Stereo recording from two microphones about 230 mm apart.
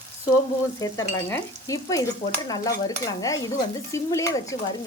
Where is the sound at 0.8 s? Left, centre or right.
Centre.